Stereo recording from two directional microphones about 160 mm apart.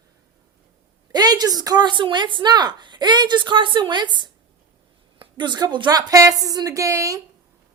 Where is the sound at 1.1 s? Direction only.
25° right (ahead or behind).